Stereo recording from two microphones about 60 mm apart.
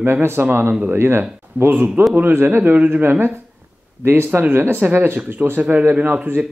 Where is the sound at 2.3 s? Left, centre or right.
Right.